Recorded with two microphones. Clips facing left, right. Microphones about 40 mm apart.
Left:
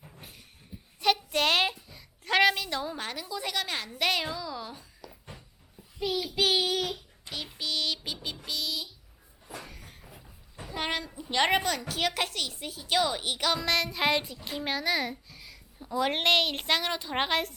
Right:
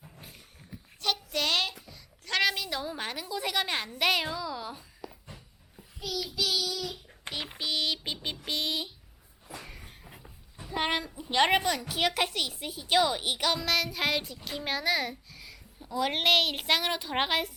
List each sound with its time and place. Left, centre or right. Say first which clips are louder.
1.0 s a child's voice: left 4 dB; centre
3.8 s a woman's voice: right 1 dB; centre
6.1 s child singing: left 4 dB; left
7.3 s a sound: right 2 dB; right
7.6 s a woman's voice: right 1 dB; centre
8.4 s a child's voice: right 3 dB; right
9.6 s a sound: even; centre
10.7 s a child's voice: right 2 dB; centre